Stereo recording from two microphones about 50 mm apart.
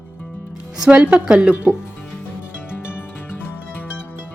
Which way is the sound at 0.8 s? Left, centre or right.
Centre.